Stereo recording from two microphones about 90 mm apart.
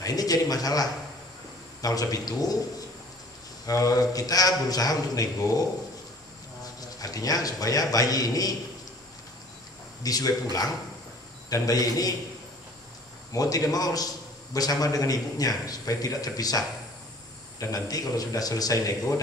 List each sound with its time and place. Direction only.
0.0 s a man's voice: 45° left (ahead or behind)
3.6 s a man's voice: 40° left (ahead or behind)
7.0 s a man's voice: 40° left (ahead or behind)
10.0 s a man's voice: 45° left (ahead or behind)
13.3 s a man's voice: 40° left (ahead or behind)